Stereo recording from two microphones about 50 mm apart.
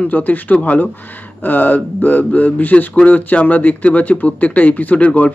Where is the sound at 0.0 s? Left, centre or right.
Left.